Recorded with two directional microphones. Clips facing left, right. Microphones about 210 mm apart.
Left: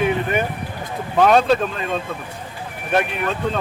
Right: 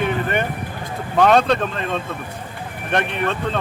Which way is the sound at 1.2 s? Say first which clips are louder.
Even; 5° left (ahead or behind).